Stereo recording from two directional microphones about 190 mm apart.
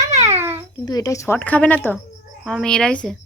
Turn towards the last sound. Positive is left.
turn(degrees=5)  # may be behind; listen again after turning